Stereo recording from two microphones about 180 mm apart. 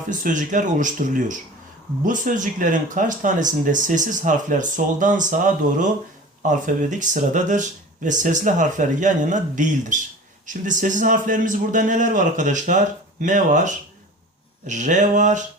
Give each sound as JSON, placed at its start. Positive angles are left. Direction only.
{"t": 0.1, "sound": "speech", "side_deg": -45}